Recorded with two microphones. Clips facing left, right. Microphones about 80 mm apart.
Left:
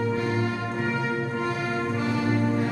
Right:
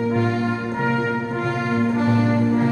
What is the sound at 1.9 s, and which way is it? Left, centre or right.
Music, right.